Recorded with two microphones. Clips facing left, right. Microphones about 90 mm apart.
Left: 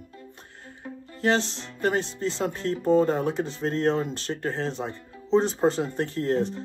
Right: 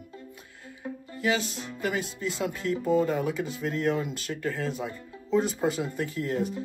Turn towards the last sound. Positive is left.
turn(degrees=40)  # may be behind; listen again after turning